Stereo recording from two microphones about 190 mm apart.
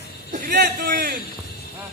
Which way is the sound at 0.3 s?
45° right (ahead or behind).